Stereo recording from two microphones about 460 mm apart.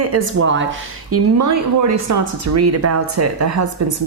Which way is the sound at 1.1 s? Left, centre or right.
Right.